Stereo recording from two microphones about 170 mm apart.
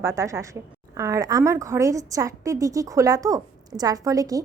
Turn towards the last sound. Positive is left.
turn(degrees=-20)  # may be behind; listen again after turning